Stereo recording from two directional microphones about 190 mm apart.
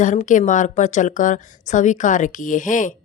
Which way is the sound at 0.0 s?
40° left (ahead or behind).